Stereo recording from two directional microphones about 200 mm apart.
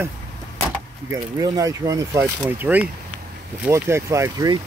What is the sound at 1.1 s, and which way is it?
Speech, 20° right (ahead or behind).